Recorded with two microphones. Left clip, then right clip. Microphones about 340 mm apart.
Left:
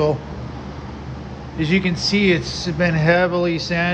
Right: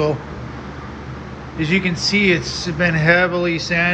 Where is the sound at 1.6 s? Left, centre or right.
Centre.